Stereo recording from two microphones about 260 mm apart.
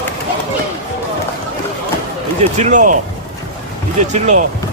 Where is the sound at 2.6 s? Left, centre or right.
Right.